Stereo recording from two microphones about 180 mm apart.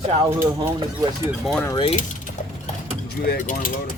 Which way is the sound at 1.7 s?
30° left (ahead or behind).